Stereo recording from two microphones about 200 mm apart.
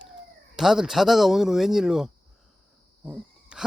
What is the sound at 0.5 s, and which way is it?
Speech, centre (ahead or behind).